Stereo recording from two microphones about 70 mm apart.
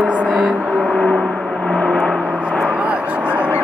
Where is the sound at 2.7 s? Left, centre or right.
Centre.